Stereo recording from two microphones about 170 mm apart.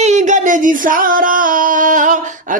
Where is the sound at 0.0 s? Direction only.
45° right (ahead or behind).